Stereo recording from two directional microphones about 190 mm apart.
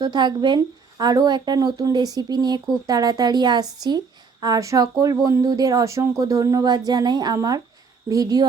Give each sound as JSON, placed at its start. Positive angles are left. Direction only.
{"t": 0.0, "sound": "a woman's voice", "side_deg": -25}